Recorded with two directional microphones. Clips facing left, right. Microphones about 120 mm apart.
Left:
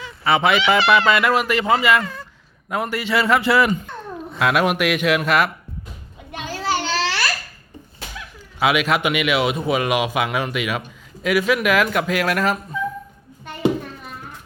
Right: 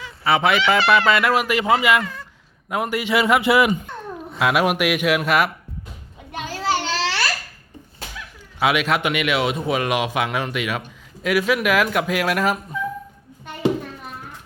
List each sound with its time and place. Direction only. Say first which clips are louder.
0.3 s a man's voice: left 1 dB; centre (ahead or behind)
6.4 s babbling: even; 35° right (ahead or behind)
8.5 s a man's voice: left 1 dB; centre (ahead or behind)